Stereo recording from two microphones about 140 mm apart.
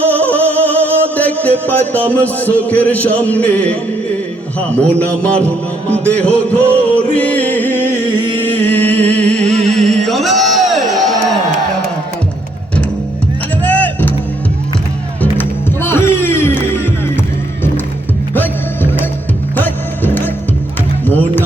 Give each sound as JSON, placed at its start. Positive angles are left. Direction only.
{"t": 0.1, "sound": "music", "side_deg": 10}
{"t": 4.8, "sound": "a man's voice", "side_deg": 10}
{"t": 7.1, "sound": "music", "side_deg": 10}
{"t": 13.6, "sound": "music", "side_deg": 10}
{"t": 15.2, "sound": "music", "side_deg": 15}
{"t": 18.3, "sound": "music", "side_deg": 15}